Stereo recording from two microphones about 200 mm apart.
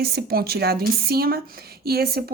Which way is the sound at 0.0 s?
50° right (ahead or behind).